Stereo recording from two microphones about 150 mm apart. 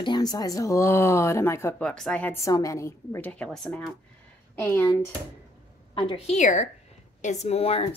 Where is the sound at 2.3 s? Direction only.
20° left (ahead or behind).